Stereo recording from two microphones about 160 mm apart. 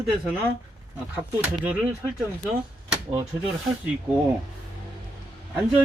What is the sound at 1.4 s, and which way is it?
Speech, 10° right (ahead or behind).